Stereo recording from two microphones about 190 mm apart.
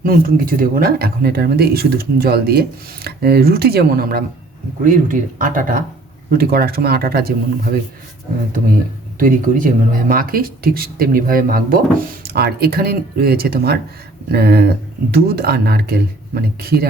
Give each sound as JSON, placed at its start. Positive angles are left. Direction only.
{"t": 0.0, "sound": "speech", "side_deg": -50}
{"t": 9.1, "sound": "speech", "side_deg": -45}